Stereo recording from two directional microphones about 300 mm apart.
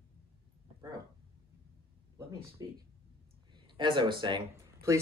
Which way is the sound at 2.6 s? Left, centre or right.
Centre.